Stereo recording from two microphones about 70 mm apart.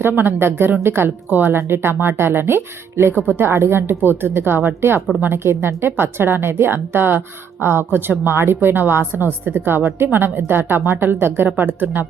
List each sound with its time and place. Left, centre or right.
0.0 s a woman's voice: right